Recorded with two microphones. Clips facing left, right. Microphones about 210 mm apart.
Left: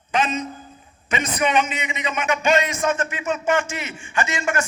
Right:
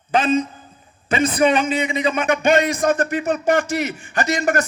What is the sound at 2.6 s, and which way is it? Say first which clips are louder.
A man's voice: right 5 dB; 35° right (ahead or behind).